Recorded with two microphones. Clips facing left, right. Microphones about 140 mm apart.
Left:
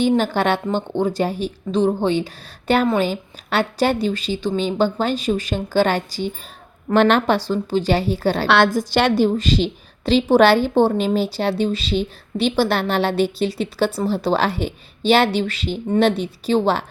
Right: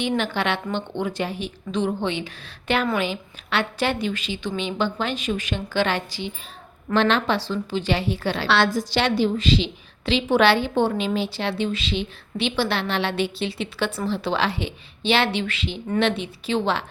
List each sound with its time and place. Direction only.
0.2 s a woman's voice: 40° left (ahead or behind)